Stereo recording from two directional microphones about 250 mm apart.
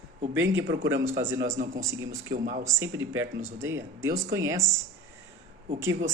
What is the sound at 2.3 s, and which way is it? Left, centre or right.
Speech, right.